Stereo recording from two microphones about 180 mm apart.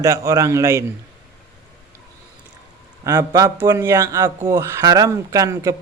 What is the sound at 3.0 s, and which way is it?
A man's voice, 15° right (ahead or behind).